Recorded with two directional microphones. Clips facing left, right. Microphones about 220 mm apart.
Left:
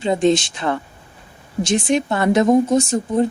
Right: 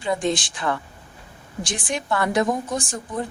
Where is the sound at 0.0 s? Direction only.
25° left (ahead or behind).